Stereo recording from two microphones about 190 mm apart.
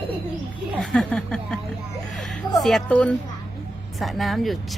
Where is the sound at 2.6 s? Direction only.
Centre (ahead or behind).